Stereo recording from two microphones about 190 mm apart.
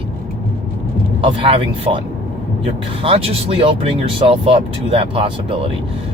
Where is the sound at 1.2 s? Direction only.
30° right (ahead or behind).